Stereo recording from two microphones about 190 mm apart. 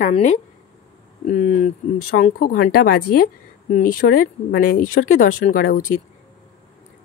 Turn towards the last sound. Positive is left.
turn(degrees=45)  # may be behind; listen again after turning